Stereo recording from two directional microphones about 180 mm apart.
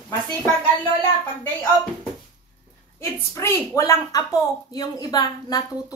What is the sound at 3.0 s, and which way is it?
A woman's voice, 15° left (ahead or behind).